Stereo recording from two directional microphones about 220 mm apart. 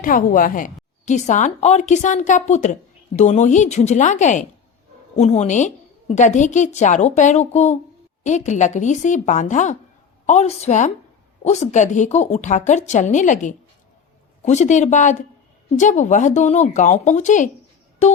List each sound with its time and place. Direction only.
0.0 s a woman's voice: 40° left (ahead or behind)